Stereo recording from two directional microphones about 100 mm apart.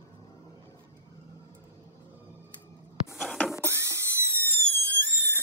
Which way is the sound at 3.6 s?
25° right (ahead or behind).